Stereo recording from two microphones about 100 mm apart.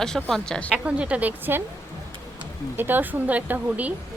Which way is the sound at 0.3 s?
5° left (ahead or behind).